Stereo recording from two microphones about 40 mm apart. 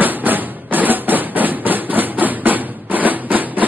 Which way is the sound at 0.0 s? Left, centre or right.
Right.